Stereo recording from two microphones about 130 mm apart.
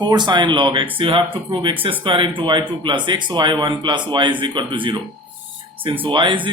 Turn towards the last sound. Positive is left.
turn(degrees=-40)  # may be behind; listen again after turning